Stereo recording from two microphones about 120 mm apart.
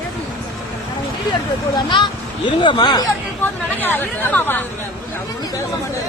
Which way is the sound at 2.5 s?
40° left (ahead or behind).